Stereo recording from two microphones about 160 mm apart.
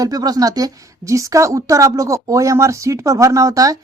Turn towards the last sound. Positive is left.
turn(degrees=-20)  # may be behind; listen again after turning